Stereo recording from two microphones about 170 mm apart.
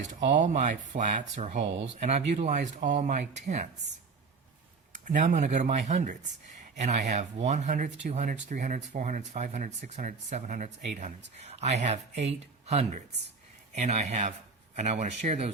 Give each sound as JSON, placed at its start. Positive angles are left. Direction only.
{"t": 0.3, "sound": "speech", "side_deg": -45}
{"t": 5.0, "sound": "speech", "side_deg": -45}